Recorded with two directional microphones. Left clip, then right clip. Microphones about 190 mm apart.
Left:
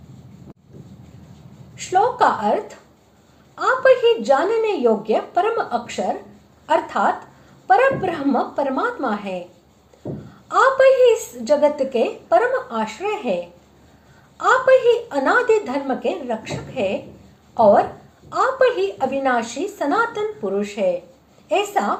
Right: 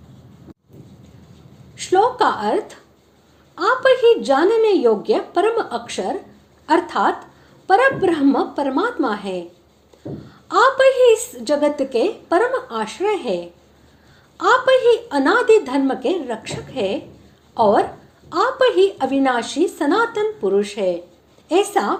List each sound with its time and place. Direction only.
1.7 s a woman's voice: 30° right (ahead or behind)
10.5 s a woman's voice: 30° right (ahead or behind)